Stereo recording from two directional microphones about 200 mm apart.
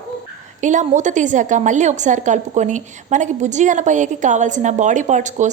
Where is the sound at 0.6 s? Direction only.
40° right (ahead or behind).